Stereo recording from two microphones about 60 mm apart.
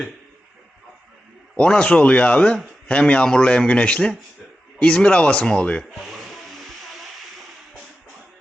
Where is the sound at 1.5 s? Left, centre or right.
Centre.